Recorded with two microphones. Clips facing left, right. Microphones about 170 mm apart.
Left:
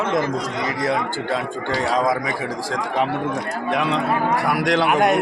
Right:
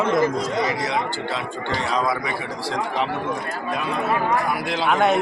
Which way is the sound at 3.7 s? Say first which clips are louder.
Left 3 dB; 80° left.